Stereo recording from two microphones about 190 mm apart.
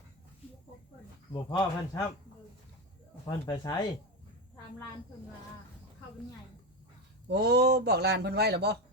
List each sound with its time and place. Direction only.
1.3 s speech: 25° left (ahead or behind)
3.2 s speech: 20° left (ahead or behind)
7.3 s a man's voice: 60° right (ahead or behind)